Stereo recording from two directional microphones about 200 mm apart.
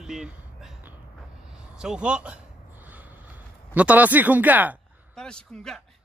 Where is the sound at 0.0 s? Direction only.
5° right (ahead or behind).